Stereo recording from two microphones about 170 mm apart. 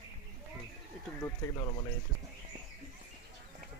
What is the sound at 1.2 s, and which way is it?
Speech, 20° left (ahead or behind).